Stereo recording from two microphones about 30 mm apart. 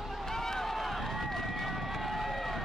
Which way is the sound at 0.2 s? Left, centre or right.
Centre.